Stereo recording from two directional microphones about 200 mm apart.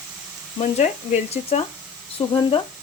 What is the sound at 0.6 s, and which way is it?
A woman's voice, 35° left (ahead or behind).